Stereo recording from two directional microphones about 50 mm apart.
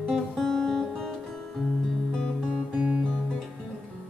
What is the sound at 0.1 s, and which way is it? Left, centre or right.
Music, centre.